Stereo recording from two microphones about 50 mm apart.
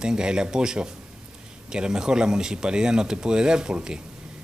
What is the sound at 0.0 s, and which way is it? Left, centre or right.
Speech, centre.